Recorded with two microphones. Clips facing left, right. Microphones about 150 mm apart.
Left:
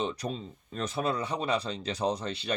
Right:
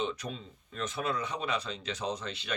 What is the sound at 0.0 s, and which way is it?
Speech, 35° left (ahead or behind).